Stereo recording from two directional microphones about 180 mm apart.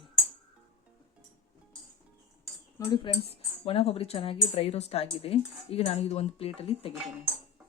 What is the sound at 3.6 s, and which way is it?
A woman's voice, 30° left (ahead or behind).